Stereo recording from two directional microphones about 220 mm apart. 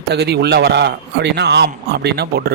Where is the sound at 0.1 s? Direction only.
50° right (ahead or behind).